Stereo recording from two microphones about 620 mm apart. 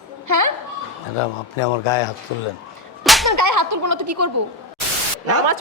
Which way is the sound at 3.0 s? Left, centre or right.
Centre.